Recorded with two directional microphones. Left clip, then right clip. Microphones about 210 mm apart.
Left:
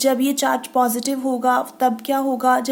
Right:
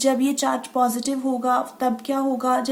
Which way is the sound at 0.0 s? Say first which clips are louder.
Left 2 dB; 30° left (ahead or behind).